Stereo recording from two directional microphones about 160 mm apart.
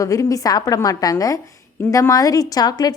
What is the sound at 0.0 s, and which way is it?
A woman's voice, 20° left (ahead or behind).